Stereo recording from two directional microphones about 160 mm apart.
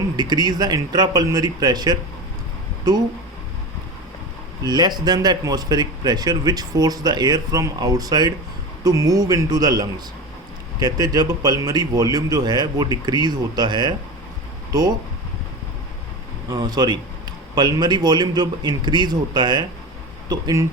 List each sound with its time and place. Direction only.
0.2 s speech: 25° right (ahead or behind)
4.6 s speech: 25° right (ahead or behind)
16.5 s speech: 25° right (ahead or behind)